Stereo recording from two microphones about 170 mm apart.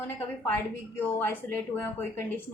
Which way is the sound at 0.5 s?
10° left (ahead or behind).